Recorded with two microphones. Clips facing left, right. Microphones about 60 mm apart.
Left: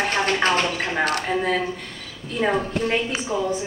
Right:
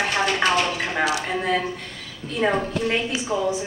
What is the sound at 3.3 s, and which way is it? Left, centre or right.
Speech, centre.